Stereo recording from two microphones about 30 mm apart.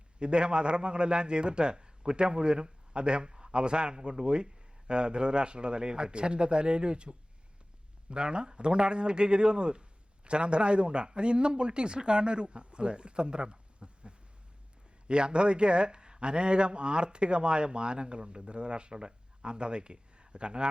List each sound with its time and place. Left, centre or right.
0.2 s a man's voice: right